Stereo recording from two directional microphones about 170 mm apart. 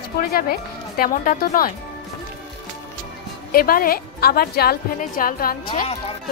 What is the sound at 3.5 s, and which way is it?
A woman's voice, 60° left (ahead or behind).